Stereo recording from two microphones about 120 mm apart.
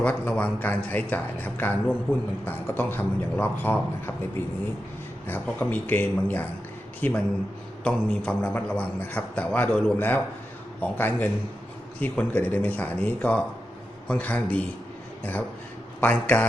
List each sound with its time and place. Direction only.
0.0 s a man's voice: 10° left (ahead or behind)
16.0 s a man's voice: 15° left (ahead or behind)